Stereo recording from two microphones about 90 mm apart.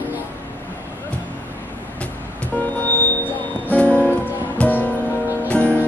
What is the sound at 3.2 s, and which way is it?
Music, 15° left (ahead or behind).